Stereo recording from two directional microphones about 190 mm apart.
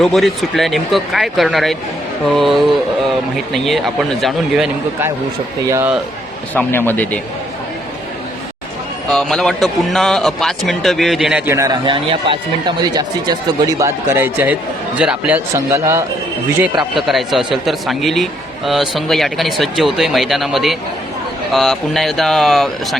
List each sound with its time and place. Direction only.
0.0 s a man's voice: centre (ahead or behind)
5.6 s speech: 15° right (ahead or behind)
6.5 s speech: 10° left (ahead or behind)
9.0 s a man's voice: 5° left (ahead or behind)
11.5 s speech: 20° right (ahead or behind)
17.1 s a man's voice: centre (ahead or behind)